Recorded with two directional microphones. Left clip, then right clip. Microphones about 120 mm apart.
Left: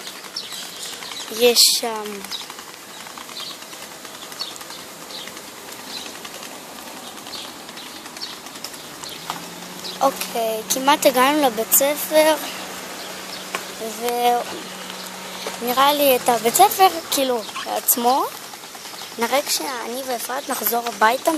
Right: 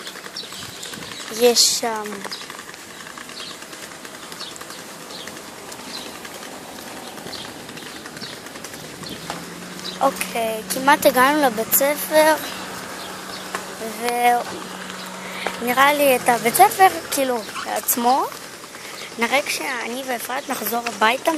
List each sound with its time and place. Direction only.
1.4 s speech: 10° left (ahead or behind)
9.9 s speech: 20° left (ahead or behind)
14.0 s speech: 20° left (ahead or behind)
15.7 s speech: 25° left (ahead or behind)